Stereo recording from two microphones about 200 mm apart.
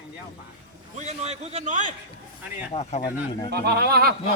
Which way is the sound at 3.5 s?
55° right (ahead or behind).